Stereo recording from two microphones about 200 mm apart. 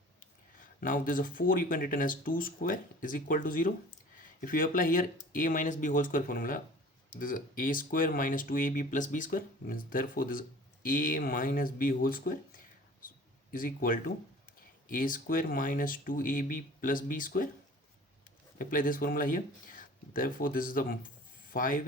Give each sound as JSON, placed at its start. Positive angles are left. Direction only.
{"t": 0.8, "sound": "speech", "side_deg": 45}
{"t": 18.6, "sound": "speech", "side_deg": 45}